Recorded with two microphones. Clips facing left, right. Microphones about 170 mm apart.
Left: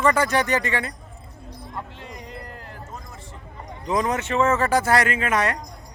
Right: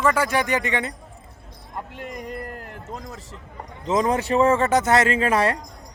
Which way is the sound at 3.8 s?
25° right (ahead or behind).